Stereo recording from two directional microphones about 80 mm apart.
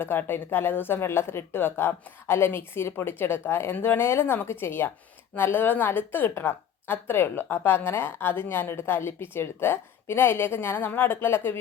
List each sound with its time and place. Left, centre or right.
0.0 s speech: left